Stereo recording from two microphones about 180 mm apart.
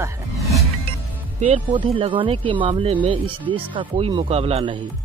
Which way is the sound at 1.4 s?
30° right (ahead or behind).